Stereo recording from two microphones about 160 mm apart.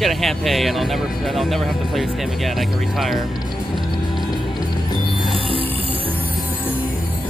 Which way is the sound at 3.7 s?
Centre (ahead or behind).